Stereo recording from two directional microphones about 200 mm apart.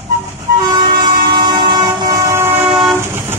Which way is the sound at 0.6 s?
20° right (ahead or behind).